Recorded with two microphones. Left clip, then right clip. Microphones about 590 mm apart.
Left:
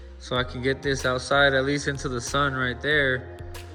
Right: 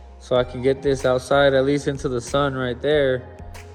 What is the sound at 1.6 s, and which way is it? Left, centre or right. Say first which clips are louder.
Speech: right 5 dB; centre.